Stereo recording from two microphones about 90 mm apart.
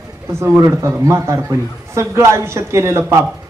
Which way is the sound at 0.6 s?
35° right (ahead or behind).